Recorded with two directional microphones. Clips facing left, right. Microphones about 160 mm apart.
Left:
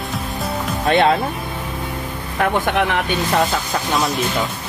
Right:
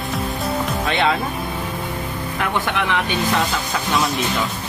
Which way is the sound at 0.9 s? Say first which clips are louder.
Left 6 dB; 45° left (ahead or behind).